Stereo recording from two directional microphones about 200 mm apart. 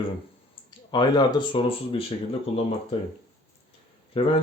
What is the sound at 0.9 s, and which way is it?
Speech, 20° left (ahead or behind).